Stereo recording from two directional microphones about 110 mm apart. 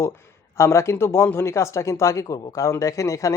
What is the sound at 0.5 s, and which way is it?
A man's voice, 25° left (ahead or behind).